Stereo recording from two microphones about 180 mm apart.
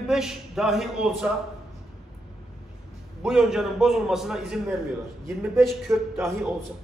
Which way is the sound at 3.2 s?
5° right (ahead or behind).